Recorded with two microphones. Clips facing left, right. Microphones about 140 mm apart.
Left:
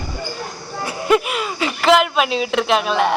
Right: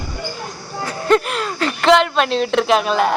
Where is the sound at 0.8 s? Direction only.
10° left (ahead or behind).